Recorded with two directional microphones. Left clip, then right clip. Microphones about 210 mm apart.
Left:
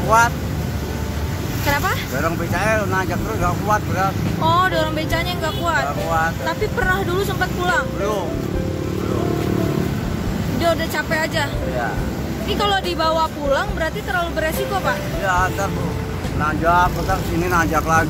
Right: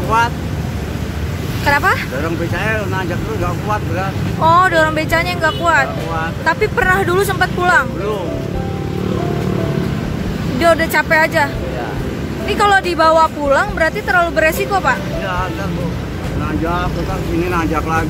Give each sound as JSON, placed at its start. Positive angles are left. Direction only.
{"t": 1.7, "sound": "speech", "side_deg": -10}
{"t": 4.4, "sound": "speech", "side_deg": -15}
{"t": 10.6, "sound": "speech", "side_deg": -15}
{"t": 12.4, "sound": "speech", "side_deg": -15}
{"t": 17.5, "sound": "speech", "side_deg": 5}